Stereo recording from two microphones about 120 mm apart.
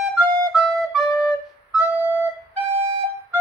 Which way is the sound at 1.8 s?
15° right (ahead or behind).